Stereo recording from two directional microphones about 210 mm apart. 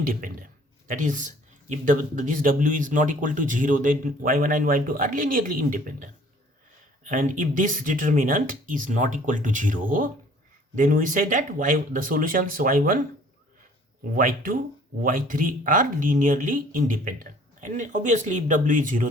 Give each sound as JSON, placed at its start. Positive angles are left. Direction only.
{"t": 0.0, "sound": "a man's voice", "side_deg": -40}
{"t": 14.0, "sound": "a man's voice", "side_deg": -40}